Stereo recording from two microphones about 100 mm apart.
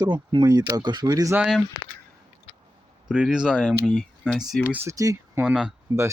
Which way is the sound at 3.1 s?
10° right (ahead or behind).